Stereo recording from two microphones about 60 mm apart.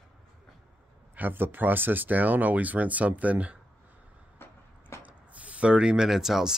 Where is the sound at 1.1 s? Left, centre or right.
Right.